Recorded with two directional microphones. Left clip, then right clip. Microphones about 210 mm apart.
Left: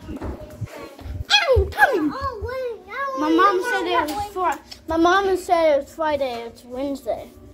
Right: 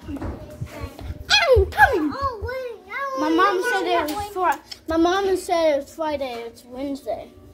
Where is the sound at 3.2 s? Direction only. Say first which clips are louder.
Left 2 dB; 5° left (ahead or behind).